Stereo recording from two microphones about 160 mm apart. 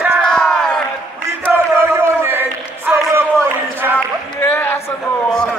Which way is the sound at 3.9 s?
15° left (ahead or behind).